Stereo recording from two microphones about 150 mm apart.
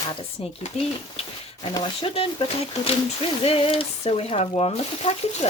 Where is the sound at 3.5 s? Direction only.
40° left (ahead or behind).